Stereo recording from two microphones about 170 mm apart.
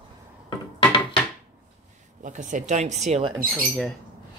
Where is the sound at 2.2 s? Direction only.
50° right (ahead or behind).